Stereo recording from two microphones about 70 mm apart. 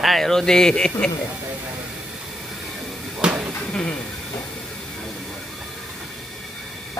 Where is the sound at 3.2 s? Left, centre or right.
Centre.